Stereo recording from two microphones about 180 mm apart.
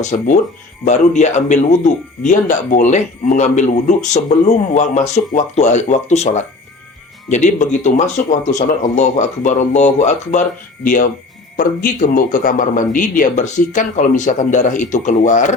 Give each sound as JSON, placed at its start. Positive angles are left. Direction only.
{"t": 0.0, "sound": "a man's voice", "side_deg": 40}